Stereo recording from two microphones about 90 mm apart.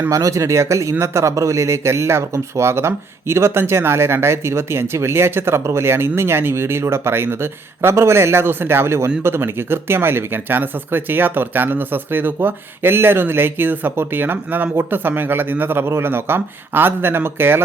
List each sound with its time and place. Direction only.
0.1 s speech: 35° right (ahead or behind)